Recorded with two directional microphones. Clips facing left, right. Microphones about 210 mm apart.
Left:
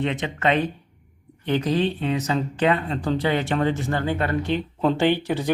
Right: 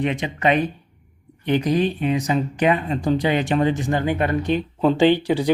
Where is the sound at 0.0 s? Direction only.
15° right (ahead or behind).